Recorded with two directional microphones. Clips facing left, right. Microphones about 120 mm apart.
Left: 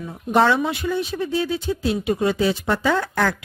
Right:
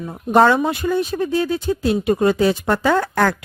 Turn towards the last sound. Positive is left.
turn(degrees=-45)  # may be behind; listen again after turning